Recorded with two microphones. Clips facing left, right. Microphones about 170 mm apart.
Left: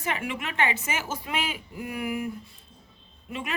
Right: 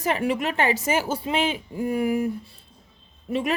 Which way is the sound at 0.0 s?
40° right (ahead or behind).